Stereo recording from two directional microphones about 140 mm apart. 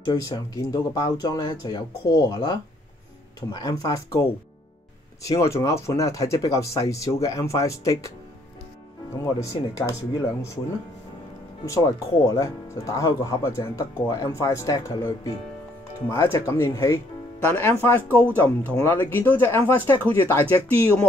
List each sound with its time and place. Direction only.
0.0 s speech: 25° left (ahead or behind)
9.2 s speech: 20° left (ahead or behind)
11.6 s speech: 20° left (ahead or behind)